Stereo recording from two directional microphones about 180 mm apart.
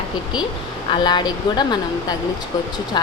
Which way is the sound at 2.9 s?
25° left (ahead or behind).